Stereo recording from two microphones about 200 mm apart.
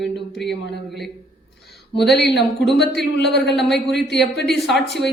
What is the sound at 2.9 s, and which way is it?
Speech, 55° left (ahead or behind).